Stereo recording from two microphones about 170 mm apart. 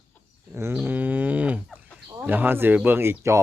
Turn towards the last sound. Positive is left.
turn(degrees=-15)  # may be behind; listen again after turning